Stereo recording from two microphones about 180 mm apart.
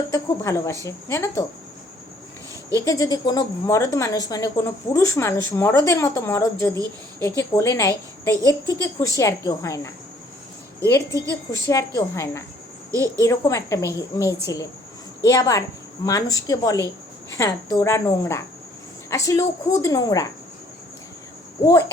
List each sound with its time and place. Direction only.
0.1 s a woman's voice: 15° left (ahead or behind)
2.7 s a woman's voice: 20° left (ahead or behind)
21.6 s a woman's voice: 20° left (ahead or behind)